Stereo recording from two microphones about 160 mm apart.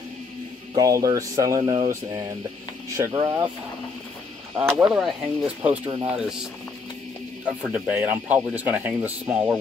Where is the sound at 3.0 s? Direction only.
20° right (ahead or behind).